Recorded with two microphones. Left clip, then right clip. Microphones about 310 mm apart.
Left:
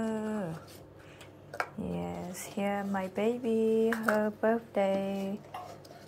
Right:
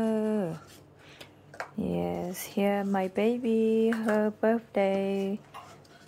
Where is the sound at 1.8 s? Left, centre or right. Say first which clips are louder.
Right 6 dB; centre.